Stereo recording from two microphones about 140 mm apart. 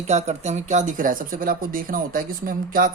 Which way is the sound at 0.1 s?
55° right (ahead or behind).